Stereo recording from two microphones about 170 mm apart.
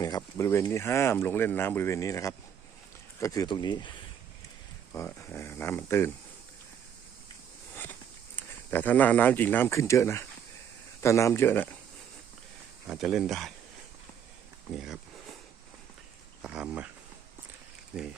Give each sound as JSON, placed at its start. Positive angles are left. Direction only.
{"t": 0.0, "sound": "speech", "side_deg": 20}
{"t": 4.9, "sound": "speech", "side_deg": 15}
{"t": 8.4, "sound": "speech", "side_deg": 10}
{"t": 12.9, "sound": "speech", "side_deg": 0}
{"t": 14.7, "sound": "speech", "side_deg": 0}
{"t": 16.4, "sound": "speech", "side_deg": -5}